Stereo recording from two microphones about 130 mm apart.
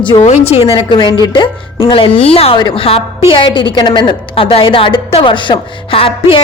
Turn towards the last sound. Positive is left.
turn(degrees=45)  # may be behind; listen again after turning